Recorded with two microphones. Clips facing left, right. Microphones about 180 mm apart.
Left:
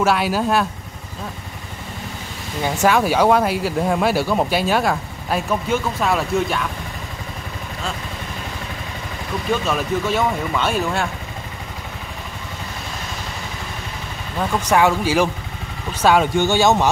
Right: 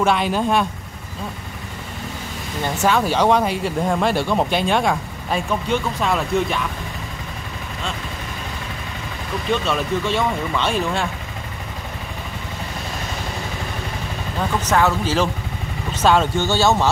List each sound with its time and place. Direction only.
0.0 s speech: 5° left (ahead or behind)
2.6 s speech: 10° left (ahead or behind)
9.5 s speech: 5° left (ahead or behind)
14.6 s speech: 10° left (ahead or behind)